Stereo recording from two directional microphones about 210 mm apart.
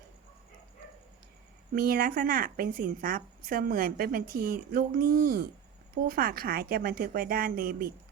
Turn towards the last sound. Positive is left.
turn(degrees=-45)  # may be behind; listen again after turning